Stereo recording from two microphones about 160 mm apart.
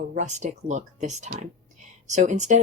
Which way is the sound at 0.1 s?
50° right (ahead or behind).